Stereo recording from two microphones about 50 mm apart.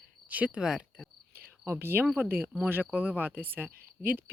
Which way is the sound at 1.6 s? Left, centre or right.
Right.